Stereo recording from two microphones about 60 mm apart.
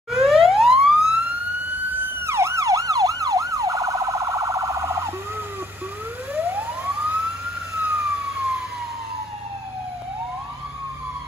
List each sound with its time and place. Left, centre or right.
0.1 s emergency vehicle: centre
2.2 s emergency vehicle: right
6.3 s emergency vehicle: right